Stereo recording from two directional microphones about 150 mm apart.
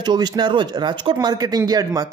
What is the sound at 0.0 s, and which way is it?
Speech, 30° right (ahead or behind).